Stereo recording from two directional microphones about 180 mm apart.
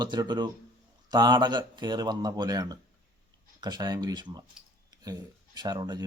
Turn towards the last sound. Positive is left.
turn(degrees=-20)  # may be behind; listen again after turning